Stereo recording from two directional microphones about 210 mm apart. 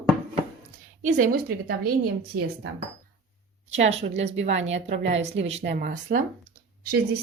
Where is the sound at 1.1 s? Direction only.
40° right (ahead or behind).